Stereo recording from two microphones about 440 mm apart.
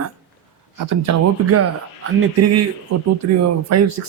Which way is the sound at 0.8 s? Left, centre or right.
Right.